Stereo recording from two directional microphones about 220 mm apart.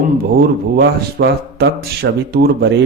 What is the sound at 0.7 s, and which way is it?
Speech, 45° right (ahead or behind).